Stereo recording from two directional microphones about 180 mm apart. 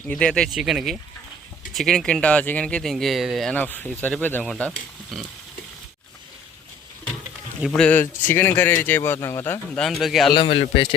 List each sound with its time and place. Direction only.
0.1 s speech: 5° left (ahead or behind)
7.6 s speech: 5° left (ahead or behind)
10.4 s a man's voice: 30° left (ahead or behind)